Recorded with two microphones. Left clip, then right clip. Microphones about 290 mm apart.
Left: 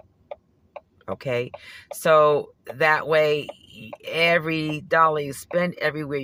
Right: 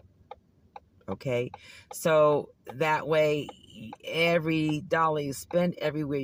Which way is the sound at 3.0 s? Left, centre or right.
Centre.